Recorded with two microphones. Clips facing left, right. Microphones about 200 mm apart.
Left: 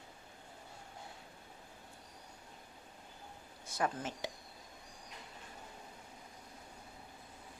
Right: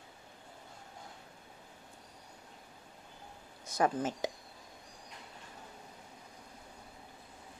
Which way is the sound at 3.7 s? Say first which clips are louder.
Right 6 dB; 40° right (ahead or behind).